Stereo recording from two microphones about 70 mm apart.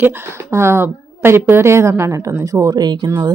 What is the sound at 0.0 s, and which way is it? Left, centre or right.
A woman's voice, right.